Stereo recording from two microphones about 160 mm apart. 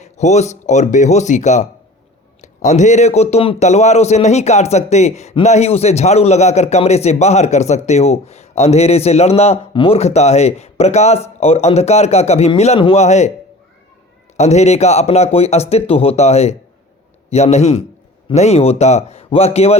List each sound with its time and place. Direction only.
0.0 s a man's voice: 45° left (ahead or behind)
14.3 s a man's voice: 45° left (ahead or behind)